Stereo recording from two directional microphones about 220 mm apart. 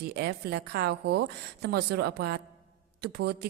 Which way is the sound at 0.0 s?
45° right (ahead or behind).